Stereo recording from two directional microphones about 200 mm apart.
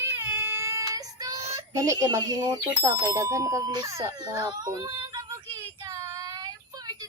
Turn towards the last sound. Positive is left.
turn(degrees=-20)  # may be behind; listen again after turning